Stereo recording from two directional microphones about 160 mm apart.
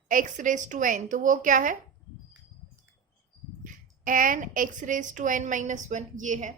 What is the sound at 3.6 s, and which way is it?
A woman's voice, 55° right (ahead or behind).